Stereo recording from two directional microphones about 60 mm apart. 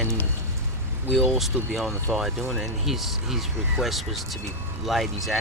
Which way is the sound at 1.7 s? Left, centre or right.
Centre.